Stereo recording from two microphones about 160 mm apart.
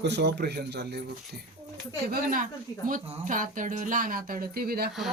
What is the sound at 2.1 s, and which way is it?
Speech, 60° right (ahead or behind).